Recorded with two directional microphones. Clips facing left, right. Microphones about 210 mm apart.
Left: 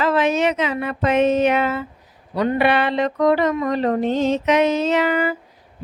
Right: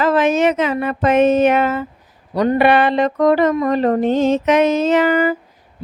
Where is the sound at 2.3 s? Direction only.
40° right (ahead or behind).